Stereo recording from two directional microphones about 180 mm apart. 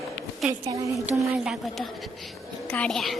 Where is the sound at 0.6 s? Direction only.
20° right (ahead or behind).